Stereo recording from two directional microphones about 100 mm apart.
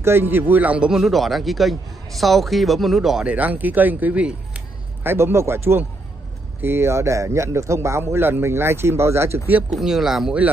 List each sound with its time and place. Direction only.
0.0 s speech: 20° right (ahead or behind); by 3.3 s 5° right (ahead or behind)
3.3 s speech: 15° right (ahead or behind)
5.0 s speech: 25° right (ahead or behind)
9.7 s speech: centre (ahead or behind)